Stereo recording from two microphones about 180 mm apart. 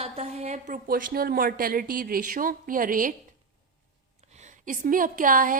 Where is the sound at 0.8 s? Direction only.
55° right (ahead or behind).